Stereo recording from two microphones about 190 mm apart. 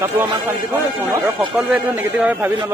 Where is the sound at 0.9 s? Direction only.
10° right (ahead or behind).